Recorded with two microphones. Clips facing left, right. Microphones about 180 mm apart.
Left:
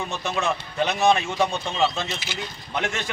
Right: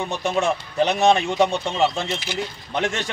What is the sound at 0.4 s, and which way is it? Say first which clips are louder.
Speech: right 4 dB; 30° right (ahead or behind).